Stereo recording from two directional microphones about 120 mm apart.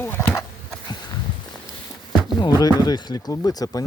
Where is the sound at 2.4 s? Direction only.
30° left (ahead or behind).